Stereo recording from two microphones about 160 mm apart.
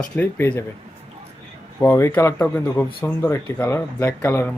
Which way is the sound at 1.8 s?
15° left (ahead or behind).